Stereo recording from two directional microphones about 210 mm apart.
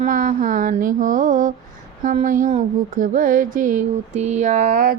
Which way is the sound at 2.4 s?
35° right (ahead or behind).